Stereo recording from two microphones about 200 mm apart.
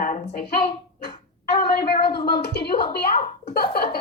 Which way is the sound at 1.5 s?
50° left (ahead or behind).